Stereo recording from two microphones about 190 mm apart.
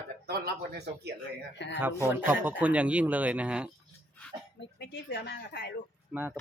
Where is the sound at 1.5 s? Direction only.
65° left (ahead or behind).